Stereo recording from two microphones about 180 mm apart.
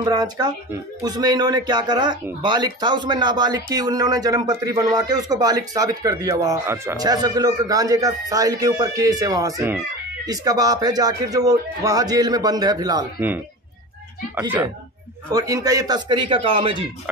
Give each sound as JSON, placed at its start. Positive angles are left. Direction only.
{"t": 0.0, "sound": "speech", "side_deg": -20}
{"t": 15.3, "sound": "speech", "side_deg": -20}